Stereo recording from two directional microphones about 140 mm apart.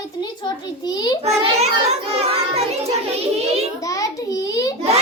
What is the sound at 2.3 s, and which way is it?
Child singing, 50° right (ahead or behind).